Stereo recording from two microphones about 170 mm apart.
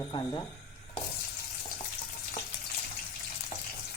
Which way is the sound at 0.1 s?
25° left (ahead or behind).